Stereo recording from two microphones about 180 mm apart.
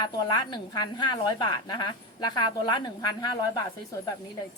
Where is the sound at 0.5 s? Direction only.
25° left (ahead or behind).